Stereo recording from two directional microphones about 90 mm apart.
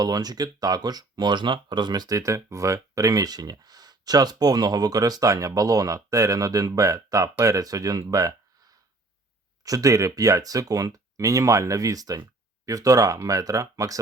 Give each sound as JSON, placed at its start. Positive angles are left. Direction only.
{"t": 0.0, "sound": "speech", "side_deg": -50}
{"t": 9.6, "sound": "speech", "side_deg": -40}